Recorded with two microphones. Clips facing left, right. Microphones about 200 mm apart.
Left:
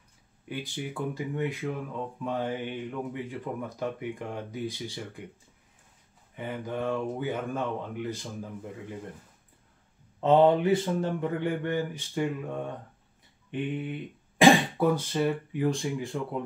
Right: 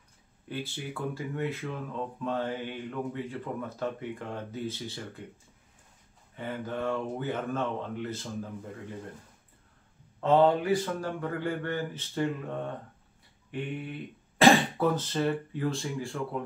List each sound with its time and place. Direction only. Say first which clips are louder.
0.5 s speech: left 1 dB; 15° left (ahead or behind)
6.3 s speech: left 1 dB; 15° left (ahead or behind)
10.2 s speech: left 2 dB; 20° left (ahead or behind)